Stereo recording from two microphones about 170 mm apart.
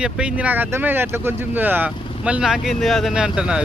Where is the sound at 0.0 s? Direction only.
5° right (ahead or behind).